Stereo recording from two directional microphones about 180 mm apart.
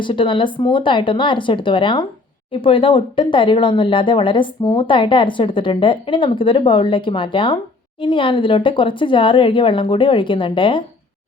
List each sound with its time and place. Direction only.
0.0 s speech: 25° left (ahead or behind)